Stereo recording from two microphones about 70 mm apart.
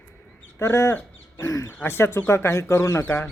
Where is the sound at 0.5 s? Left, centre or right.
Left.